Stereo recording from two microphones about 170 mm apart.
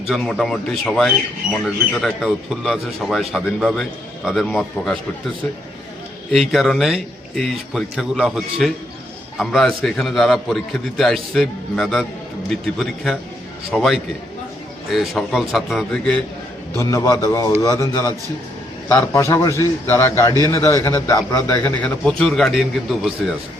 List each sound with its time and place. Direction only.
0.1 s a man's voice: centre (ahead or behind)
6.5 s a man's voice: centre (ahead or behind)
16.7 s a man's voice: 20° left (ahead or behind); by 23.3 s centre (ahead or behind)